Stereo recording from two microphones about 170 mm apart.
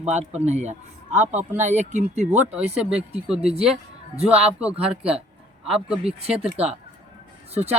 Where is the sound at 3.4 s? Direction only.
35° right (ahead or behind).